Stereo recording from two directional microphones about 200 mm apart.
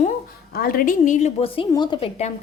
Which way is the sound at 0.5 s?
45° left (ahead or behind).